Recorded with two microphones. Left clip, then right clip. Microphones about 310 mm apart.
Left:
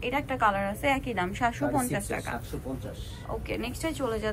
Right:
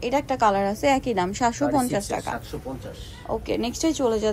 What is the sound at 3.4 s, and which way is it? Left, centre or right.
Speech, centre.